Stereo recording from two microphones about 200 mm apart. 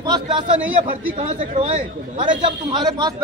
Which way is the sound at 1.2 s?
35° right (ahead or behind).